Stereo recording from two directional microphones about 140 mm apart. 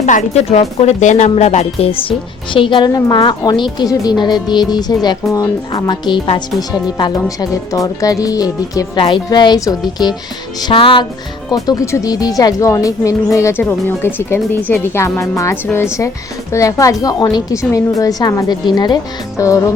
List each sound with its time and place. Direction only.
0.0 s speech: 55° left (ahead or behind); by 11.0 s 40° left (ahead or behind)
11.5 s speech: 25° left (ahead or behind)